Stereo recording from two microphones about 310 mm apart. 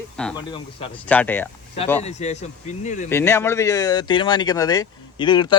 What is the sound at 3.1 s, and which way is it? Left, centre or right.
Speech, centre.